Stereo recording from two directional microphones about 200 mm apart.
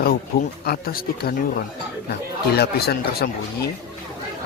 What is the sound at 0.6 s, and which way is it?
Speech, 50° left (ahead or behind).